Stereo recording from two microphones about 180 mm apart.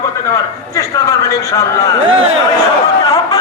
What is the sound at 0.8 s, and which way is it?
A man's voice, 20° left (ahead or behind).